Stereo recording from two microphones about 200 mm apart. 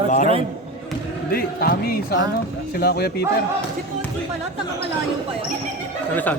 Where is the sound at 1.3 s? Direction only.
50° left (ahead or behind).